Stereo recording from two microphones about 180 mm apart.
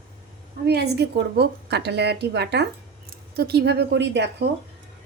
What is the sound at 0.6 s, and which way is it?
A woman's voice, 65° right (ahead or behind).